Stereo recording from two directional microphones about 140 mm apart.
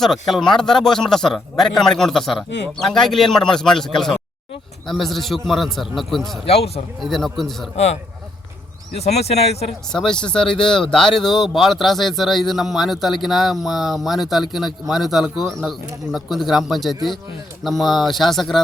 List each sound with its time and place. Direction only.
0.0 s a man's voice: centre (ahead or behind)
6.5 s speech: 45° left (ahead or behind)
7.0 s a man's voice: centre (ahead or behind)
9.0 s speech: 50° left (ahead or behind)
9.9 s a man's voice: 5° left (ahead or behind)